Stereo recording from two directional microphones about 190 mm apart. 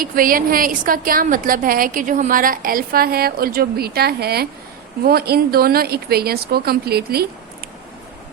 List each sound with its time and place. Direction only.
0.0 s a woman's voice: 50° right (ahead or behind)